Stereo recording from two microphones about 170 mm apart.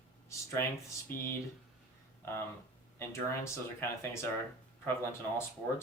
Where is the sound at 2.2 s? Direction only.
15° left (ahead or behind).